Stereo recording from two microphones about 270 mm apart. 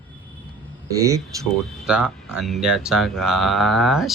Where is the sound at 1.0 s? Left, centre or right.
Centre.